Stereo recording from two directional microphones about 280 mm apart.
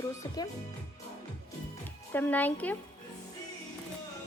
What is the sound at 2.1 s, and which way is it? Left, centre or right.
Speech, centre.